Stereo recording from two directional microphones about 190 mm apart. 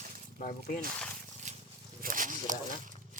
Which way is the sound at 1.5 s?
40° right (ahead or behind).